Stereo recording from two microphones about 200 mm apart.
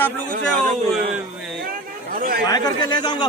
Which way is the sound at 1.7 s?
45° right (ahead or behind).